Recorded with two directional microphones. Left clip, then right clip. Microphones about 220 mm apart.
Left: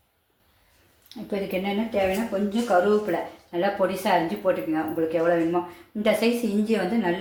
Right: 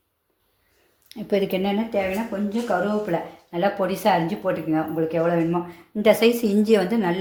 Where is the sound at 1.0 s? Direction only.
35° right (ahead or behind).